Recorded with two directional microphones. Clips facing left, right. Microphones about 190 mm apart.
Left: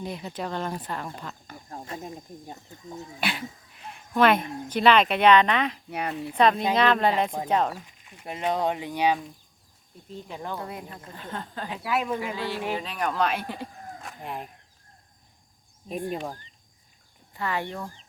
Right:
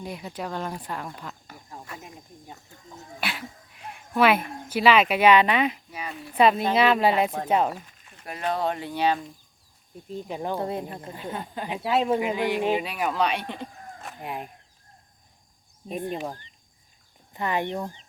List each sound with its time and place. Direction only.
0.0 s speech: 10° right (ahead or behind)
1.8 s speech: 25° left (ahead or behind)
3.2 s speech: centre (ahead or behind)
5.9 s speech: 65° left (ahead or behind)
6.3 s speech: 5° right (ahead or behind)
7.9 s speech: 15° left (ahead or behind)
10.1 s speech: 15° right (ahead or behind)
10.6 s speech: 30° right (ahead or behind)
11.1 s speech: 10° right (ahead or behind)
11.8 s speech: 25° right (ahead or behind); by 13.4 s centre (ahead or behind)
13.5 s sheep: centre (ahead or behind)
17.3 s speech: 20° right (ahead or behind)